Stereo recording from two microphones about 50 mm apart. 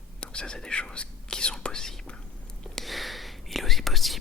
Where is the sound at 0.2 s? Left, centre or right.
Centre.